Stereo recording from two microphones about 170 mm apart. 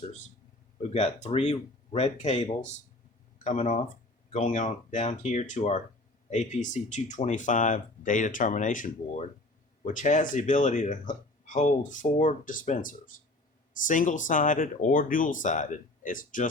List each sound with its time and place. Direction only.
0.8 s speech: 40° left (ahead or behind)